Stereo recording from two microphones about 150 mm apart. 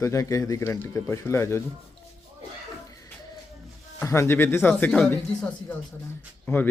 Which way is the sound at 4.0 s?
15° left (ahead or behind).